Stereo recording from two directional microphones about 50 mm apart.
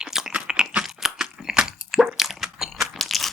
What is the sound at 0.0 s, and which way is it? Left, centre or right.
Chewing, centre.